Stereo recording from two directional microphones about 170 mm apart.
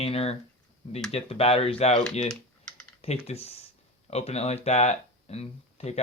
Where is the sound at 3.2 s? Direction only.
35° left (ahead or behind).